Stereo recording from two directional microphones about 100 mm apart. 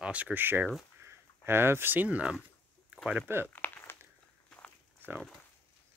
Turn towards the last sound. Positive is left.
turn(degrees=15)  # may be behind; listen again after turning